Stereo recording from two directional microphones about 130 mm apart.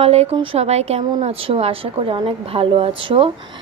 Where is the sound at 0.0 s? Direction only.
50° right (ahead or behind).